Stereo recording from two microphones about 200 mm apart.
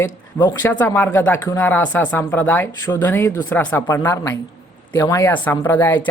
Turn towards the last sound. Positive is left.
turn(degrees=10)  # may be behind; listen again after turning